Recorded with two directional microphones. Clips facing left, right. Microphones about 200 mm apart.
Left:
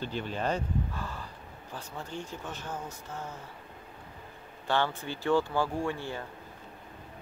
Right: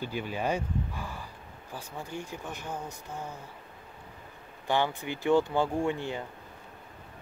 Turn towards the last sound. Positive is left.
turn(degrees=-20)  # may be behind; listen again after turning